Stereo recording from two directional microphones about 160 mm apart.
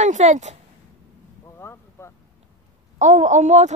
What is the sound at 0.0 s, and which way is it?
Speech, 45° right (ahead or behind).